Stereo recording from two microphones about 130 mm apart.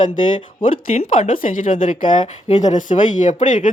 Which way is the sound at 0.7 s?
80° left.